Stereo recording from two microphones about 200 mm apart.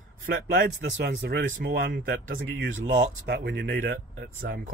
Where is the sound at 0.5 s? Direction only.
60° right (ahead or behind).